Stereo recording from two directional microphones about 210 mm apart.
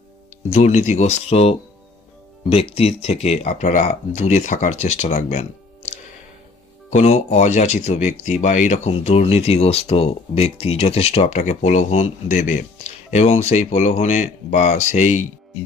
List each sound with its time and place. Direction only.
0.5 s speech: 35° left (ahead or behind)